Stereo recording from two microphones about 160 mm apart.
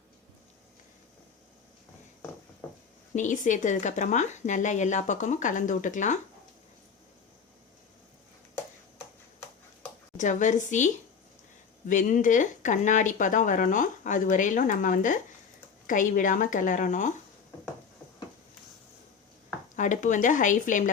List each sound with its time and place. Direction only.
3.2 s speech: 50° left (ahead or behind)
10.2 s speech: 50° left (ahead or behind)
19.7 s speech: 50° left (ahead or behind)